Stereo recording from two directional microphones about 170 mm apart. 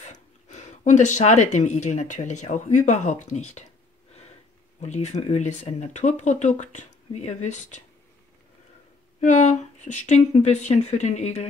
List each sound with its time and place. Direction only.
0.0 s speech: 45° left (ahead or behind)
4.8 s speech: 40° left (ahead or behind)
9.2 s speech: 45° left (ahead or behind)